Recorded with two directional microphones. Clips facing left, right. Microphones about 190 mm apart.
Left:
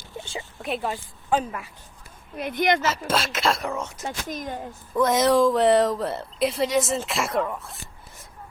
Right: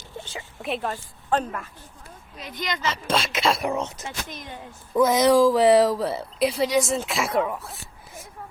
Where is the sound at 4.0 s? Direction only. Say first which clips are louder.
Left 4 dB; 45° left (ahead or behind).